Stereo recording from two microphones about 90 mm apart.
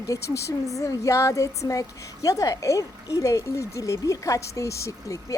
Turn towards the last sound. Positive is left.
turn(degrees=35)  # may be behind; listen again after turning